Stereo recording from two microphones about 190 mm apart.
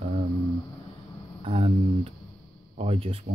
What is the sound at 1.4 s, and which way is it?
Speech, 30° right (ahead or behind).